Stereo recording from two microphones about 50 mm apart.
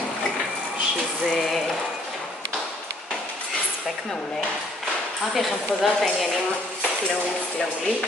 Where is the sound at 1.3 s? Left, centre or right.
Centre.